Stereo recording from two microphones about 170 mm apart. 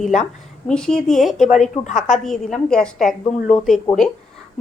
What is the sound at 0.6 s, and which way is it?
A woman's voice, 5° left (ahead or behind).